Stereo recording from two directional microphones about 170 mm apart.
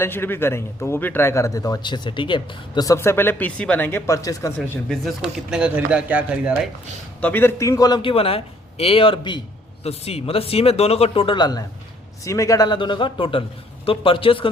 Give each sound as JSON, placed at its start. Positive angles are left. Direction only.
{"t": 0.0, "sound": "a man's voice", "side_deg": 15}
{"t": 4.5, "sound": "speech", "side_deg": 5}
{"t": 7.2, "sound": "a man's voice", "side_deg": 10}